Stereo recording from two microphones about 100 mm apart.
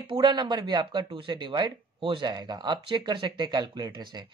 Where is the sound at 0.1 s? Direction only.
50° right (ahead or behind).